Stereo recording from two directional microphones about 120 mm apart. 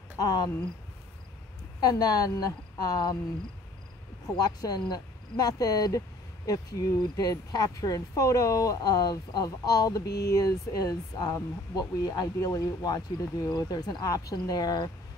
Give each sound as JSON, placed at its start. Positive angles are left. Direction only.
{"t": 0.2, "sound": "speech", "side_deg": 35}
{"t": 1.8, "sound": "speech", "side_deg": 35}
{"t": 4.4, "sound": "speech", "side_deg": 30}